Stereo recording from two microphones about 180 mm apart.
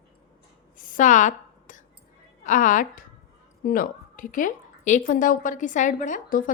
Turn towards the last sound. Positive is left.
turn(degrees=45)  # may be behind; listen again after turning